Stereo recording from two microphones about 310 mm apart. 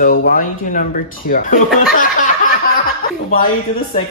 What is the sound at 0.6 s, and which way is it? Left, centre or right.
Speech, left.